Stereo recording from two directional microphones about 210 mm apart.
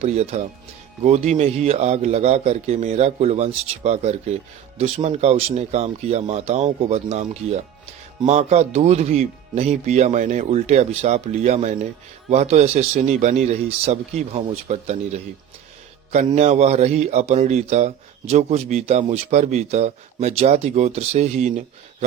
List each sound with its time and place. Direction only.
0.0 s a man's voice: 30° right (ahead or behind)